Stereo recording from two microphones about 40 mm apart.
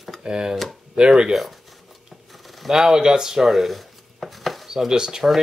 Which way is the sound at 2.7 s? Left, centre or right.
Centre.